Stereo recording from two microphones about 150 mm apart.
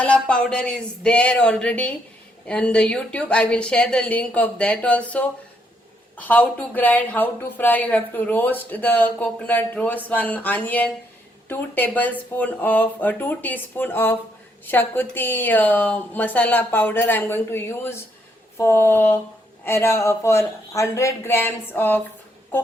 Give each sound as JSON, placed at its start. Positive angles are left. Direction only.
{"t": 0.0, "sound": "a woman's voice", "side_deg": 5}